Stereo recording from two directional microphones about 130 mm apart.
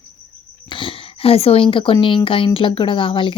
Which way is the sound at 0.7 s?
40° left (ahead or behind).